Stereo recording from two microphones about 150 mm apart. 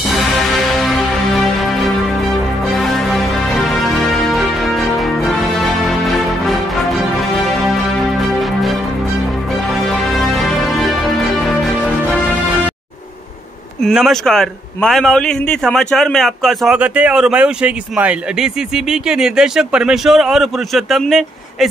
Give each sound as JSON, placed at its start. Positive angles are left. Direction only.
{"t": 0.1, "sound": "music", "side_deg": 0}
{"t": 8.2, "sound": "music", "side_deg": 0}
{"t": 10.1, "sound": "music", "side_deg": 0}
{"t": 13.8, "sound": "a man's voice", "side_deg": 0}